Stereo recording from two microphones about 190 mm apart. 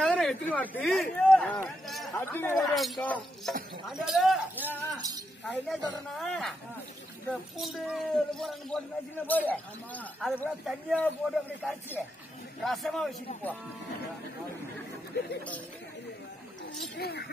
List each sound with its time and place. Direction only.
0.0 s speech: 5° left (ahead or behind)
2.6 s speech: centre (ahead or behind)
7.6 s speech: centre (ahead or behind)
16.9 s speech: 55° left (ahead or behind)